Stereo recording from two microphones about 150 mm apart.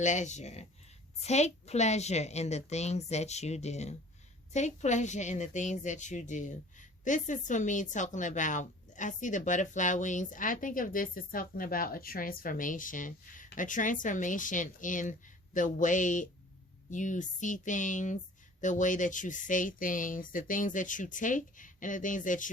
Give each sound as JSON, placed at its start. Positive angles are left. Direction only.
{"t": 0.0, "sound": "a woman's voice", "side_deg": 55}